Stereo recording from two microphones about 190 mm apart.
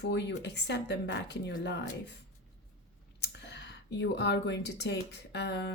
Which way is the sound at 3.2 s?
60° left (ahead or behind).